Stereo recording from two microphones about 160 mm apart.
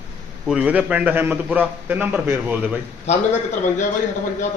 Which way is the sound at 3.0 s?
45° left (ahead or behind).